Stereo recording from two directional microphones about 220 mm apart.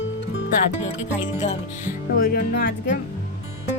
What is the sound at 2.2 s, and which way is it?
Speech, 45° left (ahead or behind).